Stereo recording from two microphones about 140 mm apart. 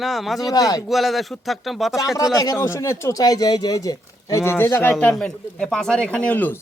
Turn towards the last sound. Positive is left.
turn(degrees=10)  # may be behind; listen again after turning